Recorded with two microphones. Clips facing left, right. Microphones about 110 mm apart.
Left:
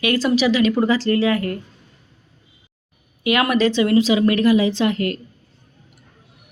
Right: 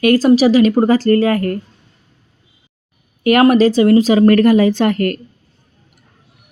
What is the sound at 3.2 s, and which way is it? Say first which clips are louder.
Speech: right 8 dB; 45° right (ahead or behind).